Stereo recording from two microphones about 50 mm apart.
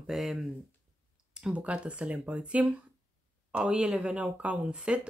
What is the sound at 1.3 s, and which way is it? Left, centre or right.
Speech, right.